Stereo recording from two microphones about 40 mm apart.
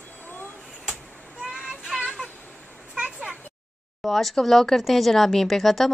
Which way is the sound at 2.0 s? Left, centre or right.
Centre.